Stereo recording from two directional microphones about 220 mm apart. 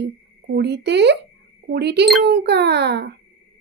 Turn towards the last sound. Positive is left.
turn(degrees=-50)  # may be behind; listen again after turning